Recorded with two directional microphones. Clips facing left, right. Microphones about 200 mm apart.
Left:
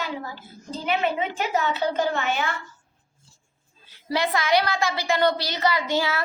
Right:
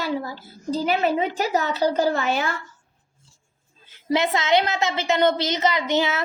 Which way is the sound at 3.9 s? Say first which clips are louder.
Right 3 dB; 20° right (ahead or behind).